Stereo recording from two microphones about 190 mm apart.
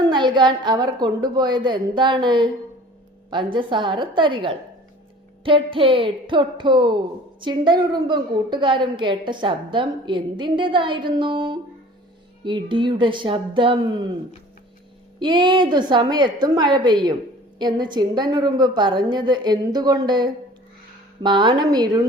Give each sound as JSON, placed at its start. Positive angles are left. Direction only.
{"t": 0.1, "sound": "a woman's voice", "side_deg": -25}
{"t": 15.2, "sound": "a woman's voice", "side_deg": -25}